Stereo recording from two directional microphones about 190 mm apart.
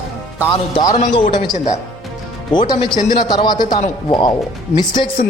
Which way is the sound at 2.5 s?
25° left (ahead or behind).